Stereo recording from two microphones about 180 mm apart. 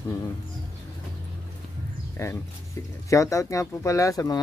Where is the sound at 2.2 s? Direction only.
15° left (ahead or behind).